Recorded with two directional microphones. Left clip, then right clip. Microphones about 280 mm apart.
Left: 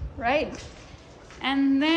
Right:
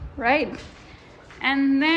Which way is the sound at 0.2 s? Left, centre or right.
Centre.